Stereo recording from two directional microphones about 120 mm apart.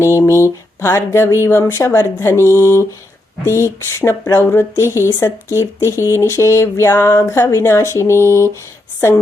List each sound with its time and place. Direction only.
0.0 s speech: 25° left (ahead or behind)